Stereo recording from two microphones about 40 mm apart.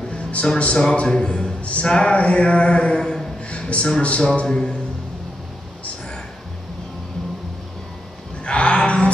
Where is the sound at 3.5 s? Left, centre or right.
Left.